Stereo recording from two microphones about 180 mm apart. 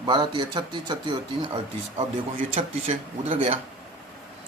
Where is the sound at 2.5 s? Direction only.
35° right (ahead or behind).